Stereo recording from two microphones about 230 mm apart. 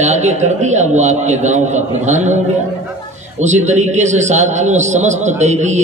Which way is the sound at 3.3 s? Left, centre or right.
Right.